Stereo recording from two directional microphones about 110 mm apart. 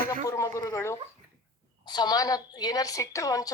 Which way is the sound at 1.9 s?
40° left (ahead or behind).